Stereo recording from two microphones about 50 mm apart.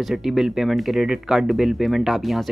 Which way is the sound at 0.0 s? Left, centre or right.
Centre.